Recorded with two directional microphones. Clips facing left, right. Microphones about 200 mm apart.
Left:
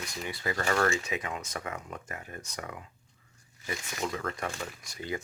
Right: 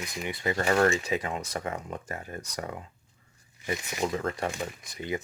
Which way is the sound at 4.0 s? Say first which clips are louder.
Right 4 dB; 30° right (ahead or behind).